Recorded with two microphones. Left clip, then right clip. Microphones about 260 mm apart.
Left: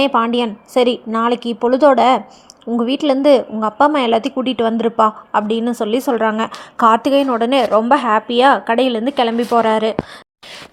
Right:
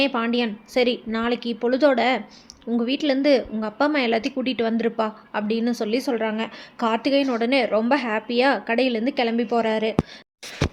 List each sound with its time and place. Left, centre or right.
0.0 s a woman's voice: centre